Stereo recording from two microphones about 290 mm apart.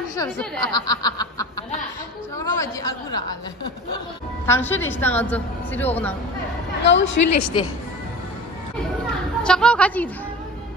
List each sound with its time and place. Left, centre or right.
0.1 s a woman's voice: centre
4.5 s a woman's voice: centre
6.8 s a woman's voice: left
7.2 s a woman's voice: left
9.4 s a woman's voice: centre